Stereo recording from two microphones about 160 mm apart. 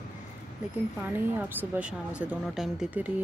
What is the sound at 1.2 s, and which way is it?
Speech, 10° right (ahead or behind).